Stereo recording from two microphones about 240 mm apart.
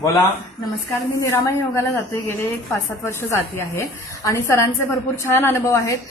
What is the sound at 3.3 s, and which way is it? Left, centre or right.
A woman's voice, centre.